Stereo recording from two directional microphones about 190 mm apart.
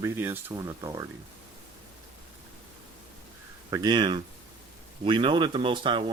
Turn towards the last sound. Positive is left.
turn(degrees=-25)  # may be behind; listen again after turning